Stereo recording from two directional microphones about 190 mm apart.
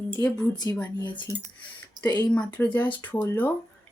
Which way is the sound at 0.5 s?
20° left (ahead or behind).